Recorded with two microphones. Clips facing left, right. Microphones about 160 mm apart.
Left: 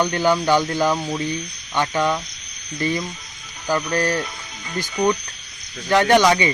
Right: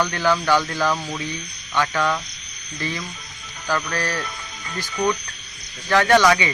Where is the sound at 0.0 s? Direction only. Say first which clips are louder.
Left 2 dB; 20° left (ahead or behind).